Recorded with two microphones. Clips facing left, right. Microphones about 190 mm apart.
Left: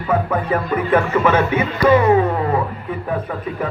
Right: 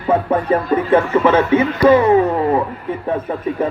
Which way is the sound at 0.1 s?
30° right (ahead or behind).